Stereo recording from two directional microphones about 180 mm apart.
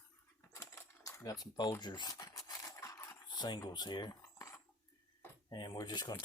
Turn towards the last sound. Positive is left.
turn(degrees=20)  # may be behind; listen again after turning